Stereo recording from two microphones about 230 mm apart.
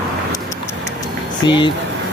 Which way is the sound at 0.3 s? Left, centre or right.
Centre.